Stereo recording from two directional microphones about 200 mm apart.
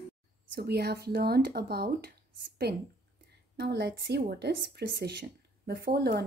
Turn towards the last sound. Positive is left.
turn(degrees=-55)  # may be behind; listen again after turning